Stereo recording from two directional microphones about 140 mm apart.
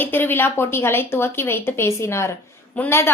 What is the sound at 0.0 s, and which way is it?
A woman's voice, 15° left (ahead or behind).